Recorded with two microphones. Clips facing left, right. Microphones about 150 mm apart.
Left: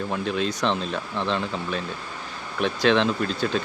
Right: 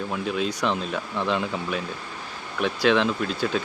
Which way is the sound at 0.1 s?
5° right (ahead or behind).